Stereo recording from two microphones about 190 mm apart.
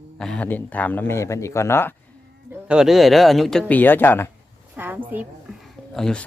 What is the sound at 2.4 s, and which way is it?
Speech, 5° right (ahead or behind).